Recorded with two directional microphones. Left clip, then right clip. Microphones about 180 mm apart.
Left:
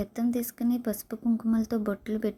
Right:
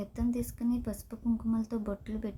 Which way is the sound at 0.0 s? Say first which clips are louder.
Left 5 dB; 25° left (ahead or behind).